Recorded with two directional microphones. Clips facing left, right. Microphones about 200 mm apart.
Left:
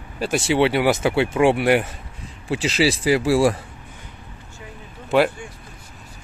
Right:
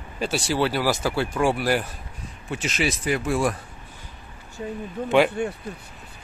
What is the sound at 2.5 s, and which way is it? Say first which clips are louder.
Speech: left 6 dB; 90° left.